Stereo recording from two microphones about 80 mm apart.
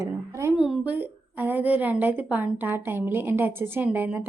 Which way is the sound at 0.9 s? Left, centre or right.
Right.